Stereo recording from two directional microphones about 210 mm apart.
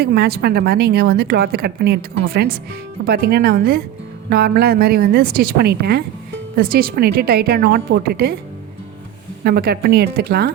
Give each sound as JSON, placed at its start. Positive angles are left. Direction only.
{"t": 0.0, "sound": "a woman's voice", "side_deg": -50}
{"t": 9.4, "sound": "a woman's voice", "side_deg": -50}